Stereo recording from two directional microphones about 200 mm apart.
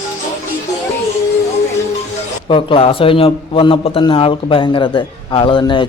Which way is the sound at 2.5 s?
25° left (ahead or behind).